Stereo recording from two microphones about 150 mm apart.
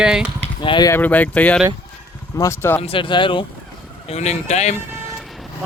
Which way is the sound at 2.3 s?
20° left (ahead or behind).